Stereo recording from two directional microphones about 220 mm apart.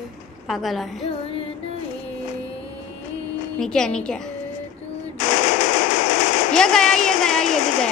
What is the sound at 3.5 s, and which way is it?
Speech, 5° left (ahead or behind).